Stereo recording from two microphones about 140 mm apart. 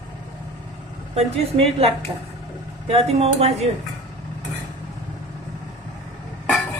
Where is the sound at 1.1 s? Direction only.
45° right (ahead or behind).